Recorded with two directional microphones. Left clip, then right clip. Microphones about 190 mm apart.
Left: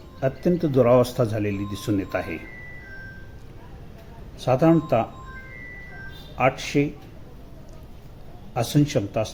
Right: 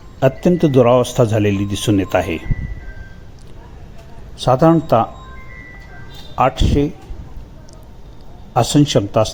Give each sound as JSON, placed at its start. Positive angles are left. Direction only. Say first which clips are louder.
{"t": 0.2, "sound": "a man's voice", "louder": "right 9 dB", "side_deg": -25}
{"t": 4.4, "sound": "a man's voice", "louder": "right 7 dB", "side_deg": -20}
{"t": 6.3, "sound": "a man's voice", "louder": "right 6 dB", "side_deg": -20}
{"t": 8.5, "sound": "a man's voice", "louder": "right 9 dB", "side_deg": -20}